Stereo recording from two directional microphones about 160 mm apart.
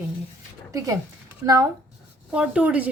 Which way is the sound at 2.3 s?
5° right (ahead or behind).